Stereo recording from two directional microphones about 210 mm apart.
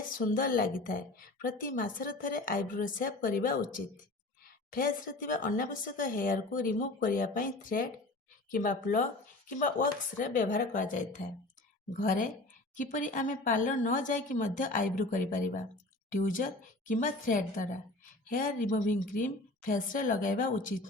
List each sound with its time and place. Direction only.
0.2 s a woman's voice: 40° left (ahead or behind)